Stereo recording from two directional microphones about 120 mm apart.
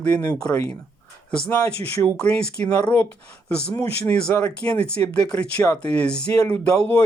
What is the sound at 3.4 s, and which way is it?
Speech, 10° left (ahead or behind).